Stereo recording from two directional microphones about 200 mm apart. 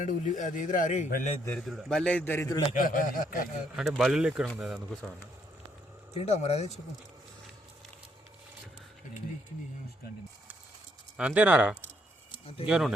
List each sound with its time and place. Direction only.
0.0 s a man's voice: 40° left (ahead or behind)
1.5 s a man's voice: centre (ahead or behind)
2.7 s speech: 45° left (ahead or behind)
3.8 s speech: centre (ahead or behind)
6.1 s a man's voice: 35° left (ahead or behind)
11.2 s speech: 5° right (ahead or behind)